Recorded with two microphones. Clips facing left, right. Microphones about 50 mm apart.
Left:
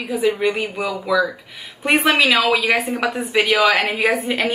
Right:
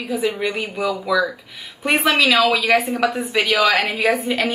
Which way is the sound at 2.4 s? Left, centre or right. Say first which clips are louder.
Right 1 dB; centre.